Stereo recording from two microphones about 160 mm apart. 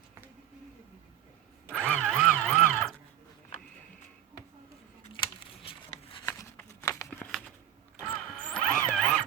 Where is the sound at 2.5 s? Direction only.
Centre (ahead or behind).